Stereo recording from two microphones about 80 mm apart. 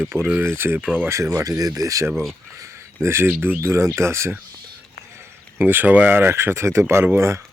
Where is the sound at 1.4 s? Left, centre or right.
Right.